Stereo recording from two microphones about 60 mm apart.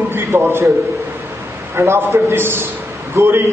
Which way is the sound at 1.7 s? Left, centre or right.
Right.